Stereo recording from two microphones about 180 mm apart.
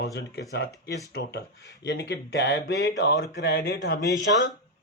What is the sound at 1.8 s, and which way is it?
Speech, 70° left (ahead or behind).